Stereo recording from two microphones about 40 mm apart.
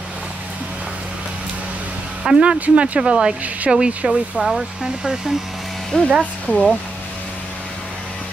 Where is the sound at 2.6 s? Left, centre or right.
Right.